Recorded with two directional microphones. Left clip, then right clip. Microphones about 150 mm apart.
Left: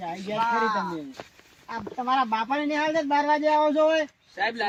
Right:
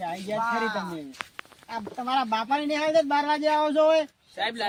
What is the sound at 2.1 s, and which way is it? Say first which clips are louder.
Speech: left 1 dB; 25° right (ahead or behind).